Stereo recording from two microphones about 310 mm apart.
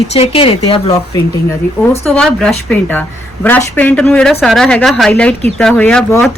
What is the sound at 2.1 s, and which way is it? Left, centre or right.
Speech, centre.